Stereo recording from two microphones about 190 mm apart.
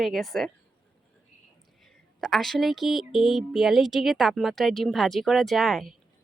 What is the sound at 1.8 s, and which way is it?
Speech, centre (ahead or behind).